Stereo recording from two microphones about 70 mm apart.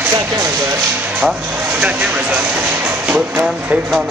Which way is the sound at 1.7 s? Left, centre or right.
Right.